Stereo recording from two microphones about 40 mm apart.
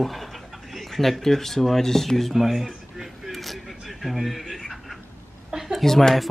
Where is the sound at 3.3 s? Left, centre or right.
Centre.